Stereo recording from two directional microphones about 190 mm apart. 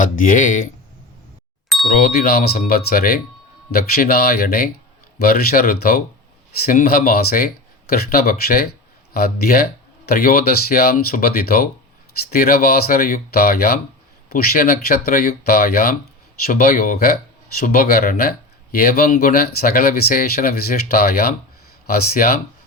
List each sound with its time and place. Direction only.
0.0 s speech: 45° left (ahead or behind)
1.9 s speech: 50° left (ahead or behind)